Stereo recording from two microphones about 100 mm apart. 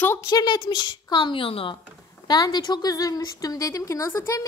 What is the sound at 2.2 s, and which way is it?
A woman's voice, 45° left (ahead or behind).